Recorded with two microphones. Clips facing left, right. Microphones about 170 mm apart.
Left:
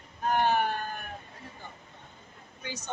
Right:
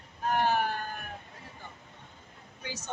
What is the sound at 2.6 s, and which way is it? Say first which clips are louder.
Speech: left 1 dB; 5° right (ahead or behind).